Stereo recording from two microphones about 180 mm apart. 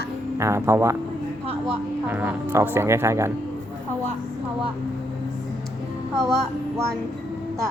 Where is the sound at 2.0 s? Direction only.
10° right (ahead or behind).